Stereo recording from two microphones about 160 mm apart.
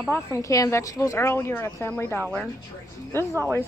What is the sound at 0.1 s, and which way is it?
Speech, 20° left (ahead or behind).